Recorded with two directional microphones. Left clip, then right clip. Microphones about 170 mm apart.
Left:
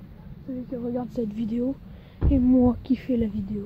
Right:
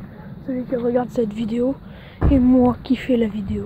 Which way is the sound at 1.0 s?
30° left (ahead or behind).